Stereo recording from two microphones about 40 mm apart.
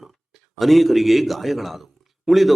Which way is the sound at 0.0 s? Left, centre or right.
Centre.